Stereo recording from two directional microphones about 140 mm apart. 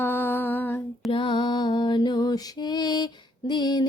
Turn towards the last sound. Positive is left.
turn(degrees=30)  # may be behind; listen again after turning